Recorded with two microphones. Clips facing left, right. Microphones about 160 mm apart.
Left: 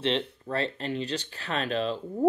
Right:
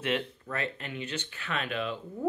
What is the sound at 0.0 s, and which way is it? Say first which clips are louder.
Speech: left 3 dB; 30° left (ahead or behind).